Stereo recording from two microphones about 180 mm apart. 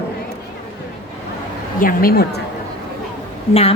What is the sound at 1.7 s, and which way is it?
Speech, 50° left (ahead or behind).